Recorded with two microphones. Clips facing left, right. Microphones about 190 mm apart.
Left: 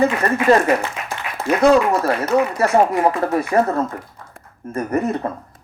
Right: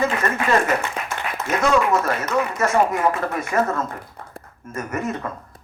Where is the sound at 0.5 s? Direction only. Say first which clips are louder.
Left 6 dB; 35° left (ahead or behind).